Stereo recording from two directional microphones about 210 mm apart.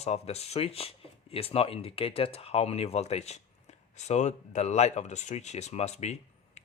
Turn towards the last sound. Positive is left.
turn(degrees=30)  # may be behind; listen again after turning